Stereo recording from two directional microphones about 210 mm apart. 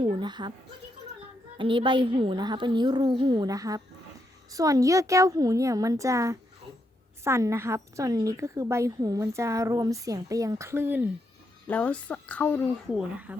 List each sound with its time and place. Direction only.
0.0 s speech: 25° right (ahead or behind)
1.5 s a woman's voice: 25° right (ahead or behind)
11.7 s speech: 5° left (ahead or behind)